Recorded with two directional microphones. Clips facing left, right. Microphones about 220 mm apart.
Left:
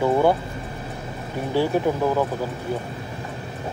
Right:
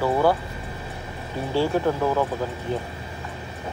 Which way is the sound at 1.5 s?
15° left (ahead or behind).